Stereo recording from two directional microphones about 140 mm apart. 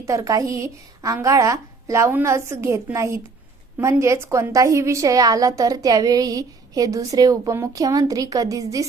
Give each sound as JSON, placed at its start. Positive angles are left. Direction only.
{"t": 0.0, "sound": "a woman's voice", "side_deg": -20}